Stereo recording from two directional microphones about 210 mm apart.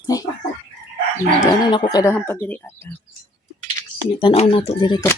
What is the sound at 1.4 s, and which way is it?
Speech, 20° left (ahead or behind).